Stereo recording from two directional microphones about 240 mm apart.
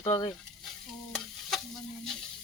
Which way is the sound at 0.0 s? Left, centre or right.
Centre.